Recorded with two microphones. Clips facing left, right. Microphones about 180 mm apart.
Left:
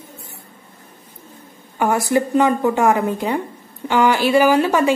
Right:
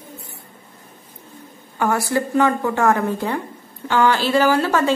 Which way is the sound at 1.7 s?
15° left (ahead or behind).